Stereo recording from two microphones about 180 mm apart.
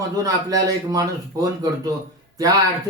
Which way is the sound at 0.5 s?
20° right (ahead or behind).